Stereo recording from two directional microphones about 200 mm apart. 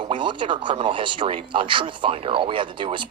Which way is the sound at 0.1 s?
25° right (ahead or behind).